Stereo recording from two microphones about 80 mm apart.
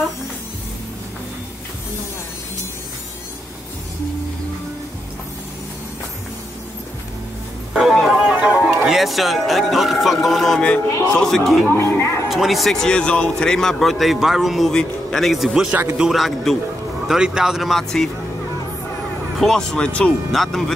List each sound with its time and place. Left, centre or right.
7.7 s music: centre
8.8 s a man's voice: centre
11.7 s speech: left
12.3 s a man's voice: centre
14.7 s a man's voice: centre
15.7 s speech: right
16.0 s a man's voice: centre
19.3 s speech: centre
20.3 s a man's voice: centre